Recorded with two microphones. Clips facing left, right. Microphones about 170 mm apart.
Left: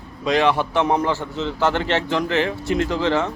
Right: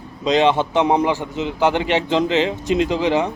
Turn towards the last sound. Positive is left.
turn(degrees=-15)  # may be behind; listen again after turning